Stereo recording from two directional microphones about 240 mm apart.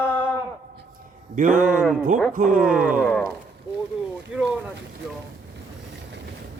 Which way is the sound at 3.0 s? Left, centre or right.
Centre.